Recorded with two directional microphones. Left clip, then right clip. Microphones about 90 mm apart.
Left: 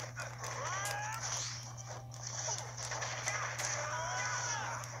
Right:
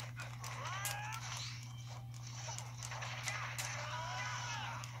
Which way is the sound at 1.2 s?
55° left (ahead or behind).